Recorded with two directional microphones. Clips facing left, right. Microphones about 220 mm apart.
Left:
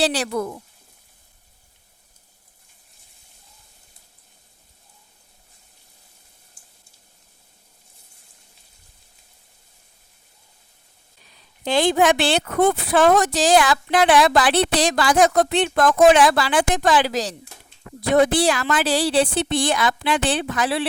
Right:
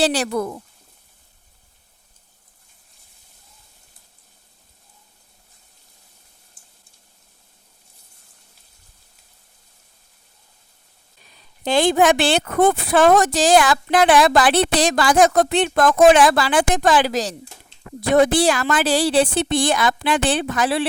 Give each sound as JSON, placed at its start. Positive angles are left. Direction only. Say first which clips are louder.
{"t": 0.0, "sound": "a woman's voice", "louder": "right 2 dB", "side_deg": -45}
{"t": 11.6, "sound": "a woman's voice", "louder": "right 2 dB", "side_deg": -50}